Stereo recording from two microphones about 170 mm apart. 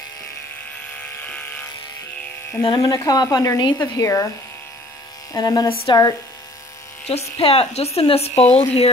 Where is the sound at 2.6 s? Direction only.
20° left (ahead or behind).